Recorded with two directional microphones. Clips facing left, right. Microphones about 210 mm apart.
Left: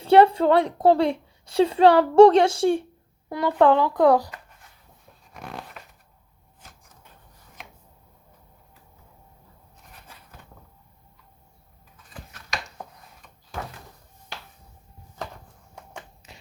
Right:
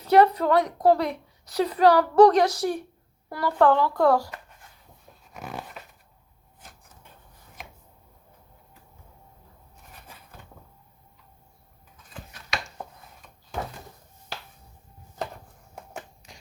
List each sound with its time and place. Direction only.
0.0 s a woman's voice: 30° left (ahead or behind)
5.3 s dog: 5° right (ahead or behind)
15.7 s a sound: 5° right (ahead or behind)